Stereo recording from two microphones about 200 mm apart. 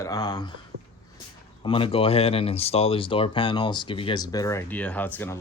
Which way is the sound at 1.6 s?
25° left (ahead or behind).